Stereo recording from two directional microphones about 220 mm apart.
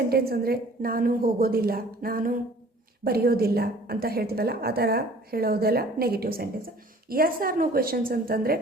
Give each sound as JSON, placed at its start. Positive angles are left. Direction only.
{"t": 0.1, "sound": "a woman's voice", "side_deg": -45}